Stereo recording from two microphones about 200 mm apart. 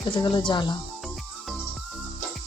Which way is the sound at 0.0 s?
25° left (ahead or behind).